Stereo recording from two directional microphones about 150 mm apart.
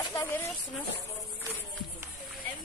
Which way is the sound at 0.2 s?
15° left (ahead or behind).